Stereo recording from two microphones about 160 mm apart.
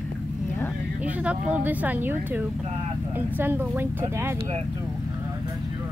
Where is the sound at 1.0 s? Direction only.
10° right (ahead or behind).